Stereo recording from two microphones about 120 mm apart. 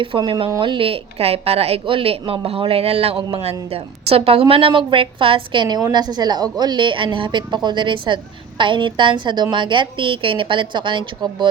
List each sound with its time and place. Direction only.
0.0 s a woman's voice: 45° right (ahead or behind)